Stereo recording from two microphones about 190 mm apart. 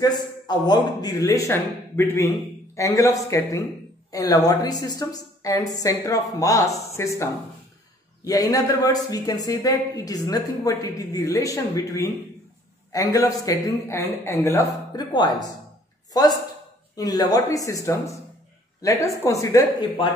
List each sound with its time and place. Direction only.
0.0 s a woman's voice: 20° left (ahead or behind)